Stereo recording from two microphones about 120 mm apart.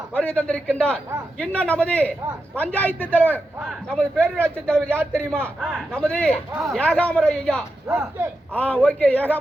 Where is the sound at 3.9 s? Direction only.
10° left (ahead or behind).